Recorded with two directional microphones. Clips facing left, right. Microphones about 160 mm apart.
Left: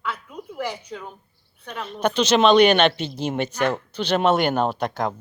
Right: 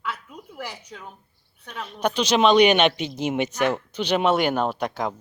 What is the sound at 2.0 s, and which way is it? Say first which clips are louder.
Speech: left 2 dB; 10° right (ahead or behind).